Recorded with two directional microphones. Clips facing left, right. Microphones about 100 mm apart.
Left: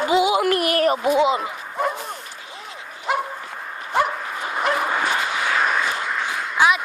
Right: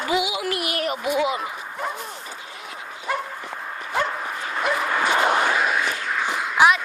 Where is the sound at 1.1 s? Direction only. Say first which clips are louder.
Left 2 dB; 25° left (ahead or behind).